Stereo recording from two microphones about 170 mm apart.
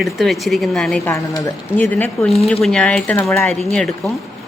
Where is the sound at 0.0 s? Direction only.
Centre (ahead or behind).